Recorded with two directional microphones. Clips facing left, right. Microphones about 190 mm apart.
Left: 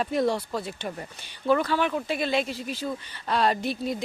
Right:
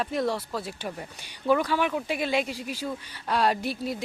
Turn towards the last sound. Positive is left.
turn(degrees=-10)  # may be behind; listen again after turning